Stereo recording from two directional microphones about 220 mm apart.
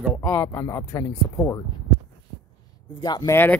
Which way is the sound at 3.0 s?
20° left (ahead or behind).